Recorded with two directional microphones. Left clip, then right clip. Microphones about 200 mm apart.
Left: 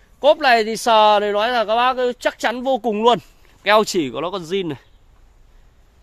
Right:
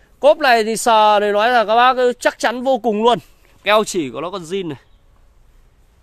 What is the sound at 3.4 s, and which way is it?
Speech, centre (ahead or behind).